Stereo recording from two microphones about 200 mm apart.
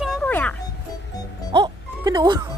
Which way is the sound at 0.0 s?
5° left (ahead or behind).